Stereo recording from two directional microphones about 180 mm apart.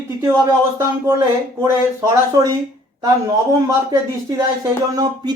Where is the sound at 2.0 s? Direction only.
20° right (ahead or behind).